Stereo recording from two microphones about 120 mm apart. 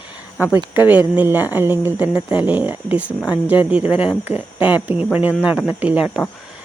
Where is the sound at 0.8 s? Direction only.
15° right (ahead or behind).